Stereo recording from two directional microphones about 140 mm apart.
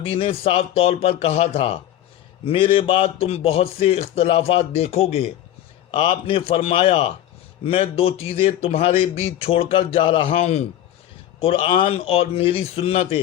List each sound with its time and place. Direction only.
0.0 s speech: 40° left (ahead or behind)
5.9 s a man's voice: 35° left (ahead or behind)